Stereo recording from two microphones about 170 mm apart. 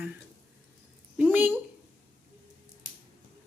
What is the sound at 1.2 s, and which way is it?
Speech, 10° right (ahead or behind).